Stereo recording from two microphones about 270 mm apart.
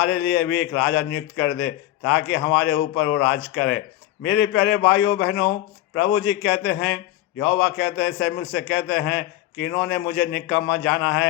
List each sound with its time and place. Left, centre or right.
0.1 s a man's voice: left